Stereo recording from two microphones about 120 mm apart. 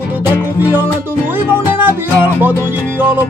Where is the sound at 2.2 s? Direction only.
15° right (ahead or behind).